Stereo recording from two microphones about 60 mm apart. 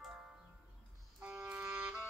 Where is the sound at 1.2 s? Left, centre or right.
Centre.